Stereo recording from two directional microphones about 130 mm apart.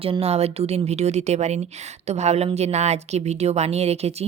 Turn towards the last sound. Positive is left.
turn(degrees=-50)  # may be behind; listen again after turning